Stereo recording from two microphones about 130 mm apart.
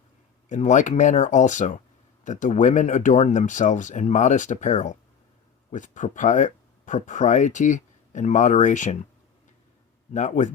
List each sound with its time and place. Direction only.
0.4 s speech: 70° left (ahead or behind)
10.1 s speech: 70° left (ahead or behind)